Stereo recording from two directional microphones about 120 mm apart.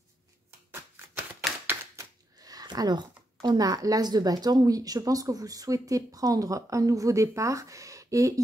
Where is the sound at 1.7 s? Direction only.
30° right (ahead or behind).